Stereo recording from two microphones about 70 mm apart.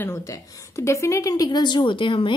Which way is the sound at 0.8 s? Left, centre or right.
Left.